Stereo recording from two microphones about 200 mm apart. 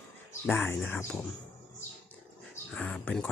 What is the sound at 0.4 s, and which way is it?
Speech, 10° left (ahead or behind).